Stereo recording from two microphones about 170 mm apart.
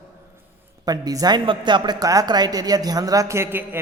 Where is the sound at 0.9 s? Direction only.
25° right (ahead or behind).